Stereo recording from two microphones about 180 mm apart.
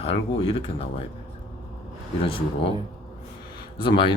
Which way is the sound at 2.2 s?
30° left (ahead or behind).